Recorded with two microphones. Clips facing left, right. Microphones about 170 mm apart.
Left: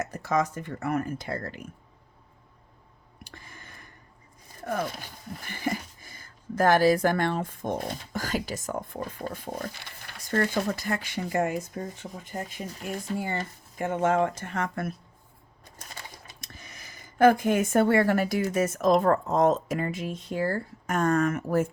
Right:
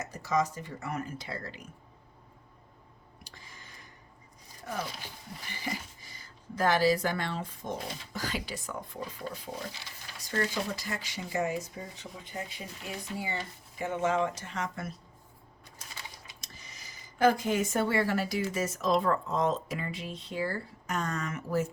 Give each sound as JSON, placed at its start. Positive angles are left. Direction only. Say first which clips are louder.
{"t": 0.0, "sound": "speech", "louder": "left 3 dB", "side_deg": 55}
{"t": 3.2, "sound": "a sound", "louder": "left 5 dB", "side_deg": 55}
{"t": 4.4, "sound": "speech", "louder": "left 7 dB", "side_deg": 55}
{"t": 16.0, "sound": "speech", "louder": "left 2 dB", "side_deg": 50}